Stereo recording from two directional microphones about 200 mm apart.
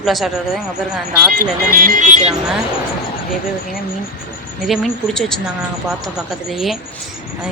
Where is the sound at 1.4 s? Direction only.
45° right (ahead or behind).